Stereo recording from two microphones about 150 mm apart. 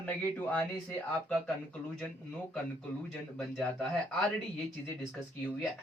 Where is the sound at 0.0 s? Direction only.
10° left (ahead or behind).